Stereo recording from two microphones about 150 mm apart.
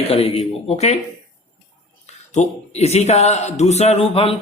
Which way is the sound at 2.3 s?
50° left (ahead or behind).